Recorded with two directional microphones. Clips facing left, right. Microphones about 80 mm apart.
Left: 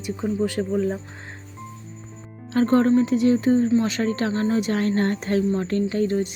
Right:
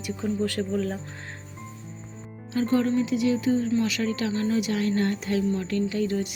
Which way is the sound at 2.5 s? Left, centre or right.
Left.